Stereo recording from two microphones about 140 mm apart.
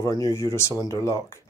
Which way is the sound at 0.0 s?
25° left (ahead or behind).